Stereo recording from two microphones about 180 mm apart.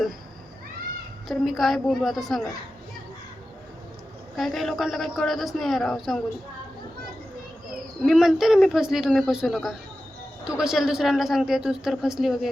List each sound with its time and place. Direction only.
1.3 s speech: centre (ahead or behind)
4.4 s speech: centre (ahead or behind)
8.0 s speech: centre (ahead or behind)